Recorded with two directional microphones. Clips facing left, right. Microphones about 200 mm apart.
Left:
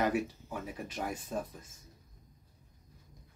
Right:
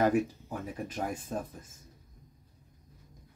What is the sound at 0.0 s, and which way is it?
Speech, 45° right (ahead or behind).